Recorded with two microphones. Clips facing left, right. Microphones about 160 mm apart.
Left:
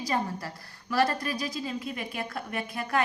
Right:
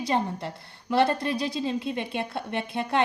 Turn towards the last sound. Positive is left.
turn(degrees=-25)  # may be behind; listen again after turning